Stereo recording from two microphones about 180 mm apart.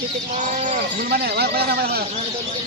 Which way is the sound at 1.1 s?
60° right (ahead or behind).